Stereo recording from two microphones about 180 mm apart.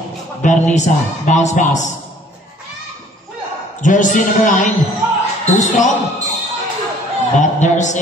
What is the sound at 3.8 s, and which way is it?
Speech, 45° left (ahead or behind).